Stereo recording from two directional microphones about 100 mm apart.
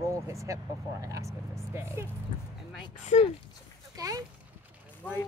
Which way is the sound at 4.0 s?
35° right (ahead or behind).